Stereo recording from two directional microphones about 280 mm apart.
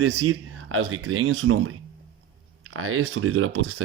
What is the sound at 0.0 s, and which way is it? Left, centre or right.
Speech, right.